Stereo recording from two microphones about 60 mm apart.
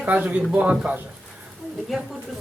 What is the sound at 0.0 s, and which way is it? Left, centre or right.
Speech, right.